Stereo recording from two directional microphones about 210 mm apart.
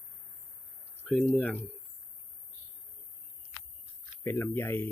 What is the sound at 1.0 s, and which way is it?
Speech, 5° left (ahead or behind).